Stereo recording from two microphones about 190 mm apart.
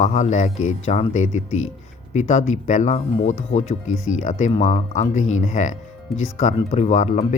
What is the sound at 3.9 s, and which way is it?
Speech, 90° left.